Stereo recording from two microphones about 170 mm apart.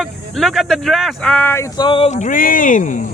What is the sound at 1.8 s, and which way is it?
Speech, 35° left (ahead or behind).